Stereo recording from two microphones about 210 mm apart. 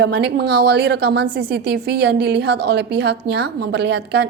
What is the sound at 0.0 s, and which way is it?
A woman's voice, 50° right (ahead or behind).